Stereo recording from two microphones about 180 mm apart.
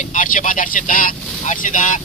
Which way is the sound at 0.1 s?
45° left (ahead or behind).